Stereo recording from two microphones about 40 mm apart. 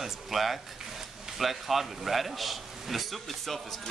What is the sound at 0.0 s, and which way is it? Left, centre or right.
A man's voice, centre.